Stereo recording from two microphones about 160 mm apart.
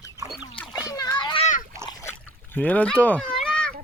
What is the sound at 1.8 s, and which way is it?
Splash, 15° left (ahead or behind).